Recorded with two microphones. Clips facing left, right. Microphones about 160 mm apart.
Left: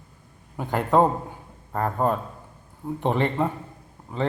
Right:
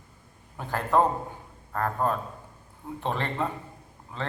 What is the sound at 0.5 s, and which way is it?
A man's voice, 15° left (ahead or behind).